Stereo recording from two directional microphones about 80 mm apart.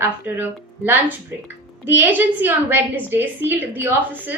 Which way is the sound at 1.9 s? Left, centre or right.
Right.